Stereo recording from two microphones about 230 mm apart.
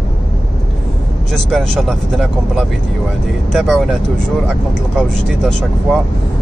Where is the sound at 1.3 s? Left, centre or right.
Centre.